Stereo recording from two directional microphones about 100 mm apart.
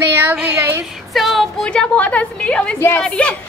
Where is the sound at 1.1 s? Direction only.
Centre (ahead or behind).